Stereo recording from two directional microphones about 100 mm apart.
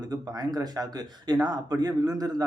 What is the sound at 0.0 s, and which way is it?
Speech, 40° right (ahead or behind).